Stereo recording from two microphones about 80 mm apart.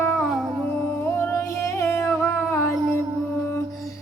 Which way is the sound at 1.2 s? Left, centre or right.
Left.